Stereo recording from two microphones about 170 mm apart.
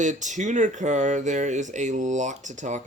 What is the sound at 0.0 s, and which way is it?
Speech, 45° right (ahead or behind).